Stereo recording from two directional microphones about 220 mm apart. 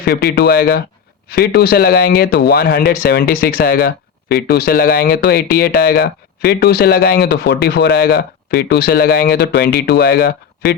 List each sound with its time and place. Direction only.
0.0 s speech: 45° left (ahead or behind)